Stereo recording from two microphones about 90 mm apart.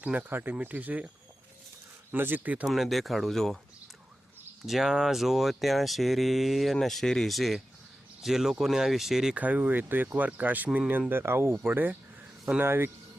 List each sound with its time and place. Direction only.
0.0 s speech: 15° right (ahead or behind)
2.1 s speech: 20° right (ahead or behind)
2.6 s speech: centre (ahead or behind)
4.6 s speech: centre (ahead or behind)
9.4 s speech: 15° right (ahead or behind)